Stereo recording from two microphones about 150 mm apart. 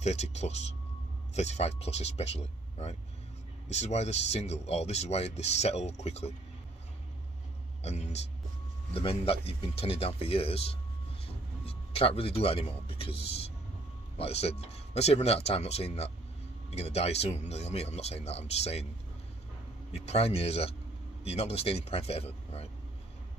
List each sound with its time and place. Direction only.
0.0 s speech: 50° left (ahead or behind)
7.8 s a man's voice: 45° left (ahead or behind)
19.9 s speech: 45° left (ahead or behind)